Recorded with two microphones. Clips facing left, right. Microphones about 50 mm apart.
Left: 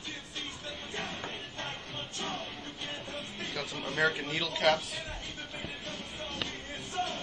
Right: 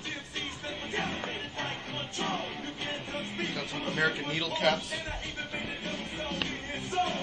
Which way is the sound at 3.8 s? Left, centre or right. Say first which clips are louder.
Even; right.